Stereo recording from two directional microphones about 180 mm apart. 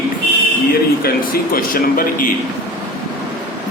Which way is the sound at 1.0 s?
50° left (ahead or behind).